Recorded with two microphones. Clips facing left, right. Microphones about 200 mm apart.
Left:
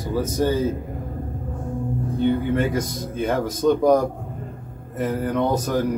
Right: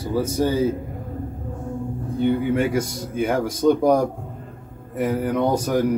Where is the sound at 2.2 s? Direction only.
15° right (ahead or behind).